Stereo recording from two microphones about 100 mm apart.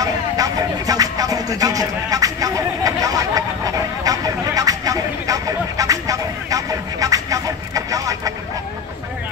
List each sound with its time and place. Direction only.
0.0 s music: 35° right (ahead or behind)